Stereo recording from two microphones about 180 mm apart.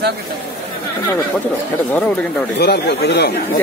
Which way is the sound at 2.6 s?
65° left (ahead or behind).